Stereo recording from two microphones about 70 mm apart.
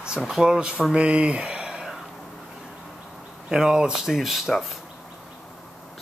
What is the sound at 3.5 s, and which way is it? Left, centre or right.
Speech, centre.